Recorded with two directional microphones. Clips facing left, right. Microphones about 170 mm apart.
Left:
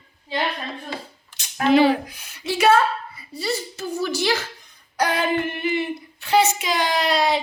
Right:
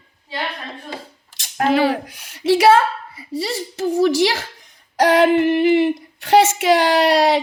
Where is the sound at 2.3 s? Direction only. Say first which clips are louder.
Right 5 dB; 90° right; by 7.4 s 75° right (ahead or behind).